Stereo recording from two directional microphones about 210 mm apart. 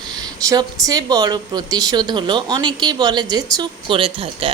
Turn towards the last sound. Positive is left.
turn(degrees=-25)  # may be behind; listen again after turning